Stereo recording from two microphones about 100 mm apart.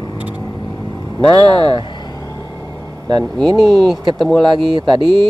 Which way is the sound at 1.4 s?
50° right (ahead or behind).